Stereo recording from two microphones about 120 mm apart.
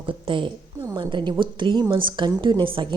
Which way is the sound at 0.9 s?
40° right (ahead or behind).